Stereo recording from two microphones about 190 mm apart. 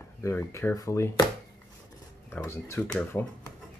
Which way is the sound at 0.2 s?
15° left (ahead or behind).